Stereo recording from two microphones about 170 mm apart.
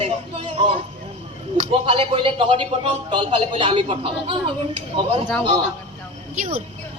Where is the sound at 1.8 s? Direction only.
35° right (ahead or behind).